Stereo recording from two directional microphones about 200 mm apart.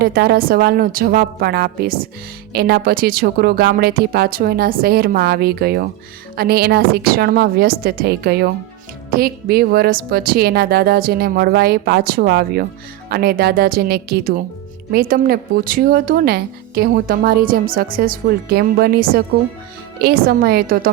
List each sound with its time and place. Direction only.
0.0 s speech: 50° right (ahead or behind)